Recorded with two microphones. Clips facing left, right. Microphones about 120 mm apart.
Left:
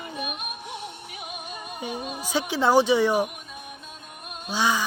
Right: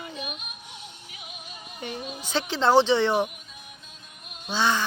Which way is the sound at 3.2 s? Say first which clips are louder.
Left 6 dB; 55° left (ahead or behind).